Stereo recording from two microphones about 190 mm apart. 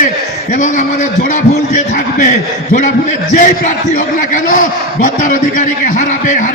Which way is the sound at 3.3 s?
45° left (ahead or behind).